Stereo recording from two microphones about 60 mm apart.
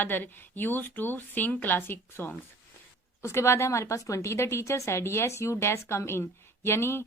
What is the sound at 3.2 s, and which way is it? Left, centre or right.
A woman's voice, left.